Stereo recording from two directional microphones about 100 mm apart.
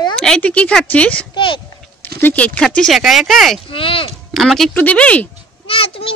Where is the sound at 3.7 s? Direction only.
65° left (ahead or behind).